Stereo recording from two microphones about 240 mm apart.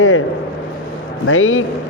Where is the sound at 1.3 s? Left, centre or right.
Left.